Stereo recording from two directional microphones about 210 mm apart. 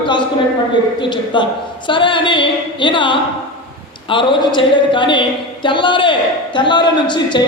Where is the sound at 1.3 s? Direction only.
20° left (ahead or behind).